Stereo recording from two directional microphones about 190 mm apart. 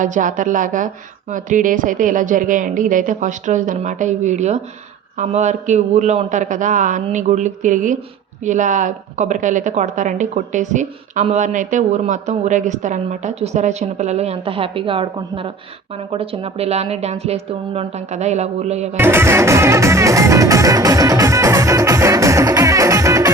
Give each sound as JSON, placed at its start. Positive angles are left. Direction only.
{"t": 0.0, "sound": "a woman's voice", "side_deg": -40}
{"t": 18.9, "sound": "music", "side_deg": -10}